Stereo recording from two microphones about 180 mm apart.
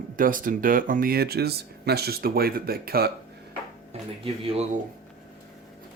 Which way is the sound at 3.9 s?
30° right (ahead or behind).